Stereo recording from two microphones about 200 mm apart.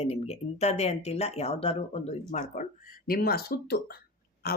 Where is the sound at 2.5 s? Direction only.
45° left (ahead or behind).